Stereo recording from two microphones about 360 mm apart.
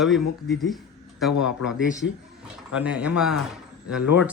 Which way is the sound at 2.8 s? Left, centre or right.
Centre.